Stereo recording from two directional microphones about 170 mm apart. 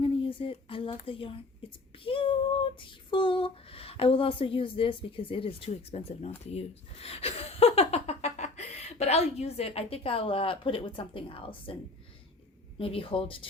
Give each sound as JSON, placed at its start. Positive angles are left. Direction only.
{"t": 0.0, "sound": "speech", "side_deg": 30}
{"t": 2.0, "sound": "female singing", "side_deg": 30}
{"t": 6.4, "sound": "speech", "side_deg": 40}
{"t": 12.8, "sound": "speech", "side_deg": 35}